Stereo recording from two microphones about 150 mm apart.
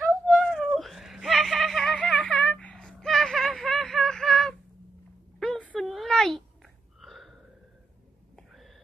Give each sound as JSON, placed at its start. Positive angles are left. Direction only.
{"t": 0.0, "sound": "whimper", "side_deg": 0}
{"t": 5.4, "sound": "a sound", "side_deg": 5}
{"t": 8.4, "sound": "owl", "side_deg": 0}